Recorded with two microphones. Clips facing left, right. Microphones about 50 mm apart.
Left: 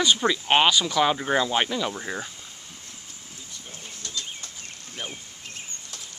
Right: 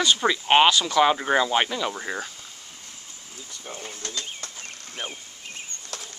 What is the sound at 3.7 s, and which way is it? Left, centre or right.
Bird, right.